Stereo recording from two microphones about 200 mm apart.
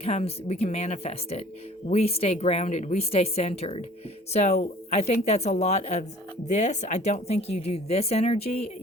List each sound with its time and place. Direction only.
0.0 s speech: 30° left (ahead or behind)